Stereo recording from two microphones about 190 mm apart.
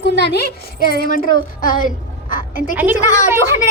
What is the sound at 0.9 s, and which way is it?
A woman's voice, 50° left (ahead or behind).